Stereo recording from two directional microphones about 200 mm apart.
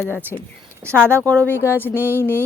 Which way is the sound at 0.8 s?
10° right (ahead or behind).